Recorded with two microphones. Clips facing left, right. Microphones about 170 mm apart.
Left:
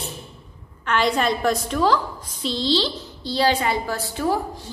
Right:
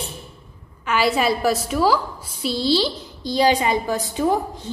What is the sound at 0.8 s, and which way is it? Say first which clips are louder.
A woman's voice: right 1 dB; 5° right (ahead or behind).